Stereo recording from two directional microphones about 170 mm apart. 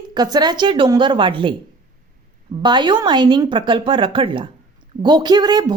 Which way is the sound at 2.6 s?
25° right (ahead or behind).